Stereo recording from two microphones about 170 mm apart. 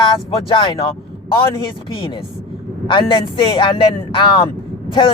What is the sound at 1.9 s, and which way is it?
Speech, 30° left (ahead or behind).